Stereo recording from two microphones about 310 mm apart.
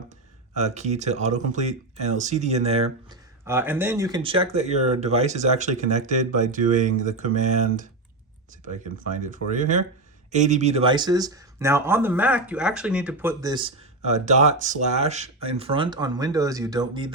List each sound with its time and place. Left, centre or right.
0.5 s speech: right
3.4 s speech: centre; by 6.8 s right
9.2 s speech: right